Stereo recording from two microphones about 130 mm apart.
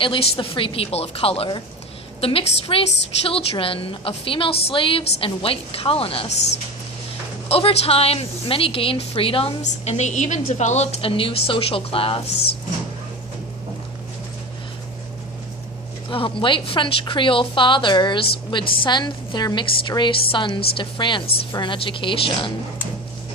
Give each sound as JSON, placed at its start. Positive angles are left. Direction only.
{"t": 0.0, "sound": "a woman's voice", "side_deg": 40}
{"t": 7.4, "sound": "a woman's voice", "side_deg": 50}
{"t": 11.0, "sound": "a woman's voice", "side_deg": 45}
{"t": 16.0, "sound": "a woman's voice", "side_deg": 40}